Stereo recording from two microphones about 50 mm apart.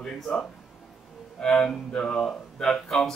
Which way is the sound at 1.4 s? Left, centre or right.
Centre.